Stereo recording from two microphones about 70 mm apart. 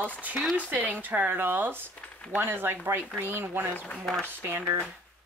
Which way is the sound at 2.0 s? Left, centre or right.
Centre.